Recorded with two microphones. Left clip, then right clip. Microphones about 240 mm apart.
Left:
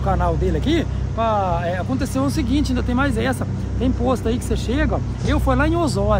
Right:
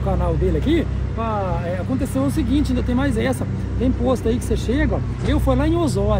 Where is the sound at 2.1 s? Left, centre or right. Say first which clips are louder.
Even; centre.